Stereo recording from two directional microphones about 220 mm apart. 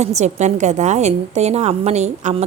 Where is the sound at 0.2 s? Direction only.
30° right (ahead or behind).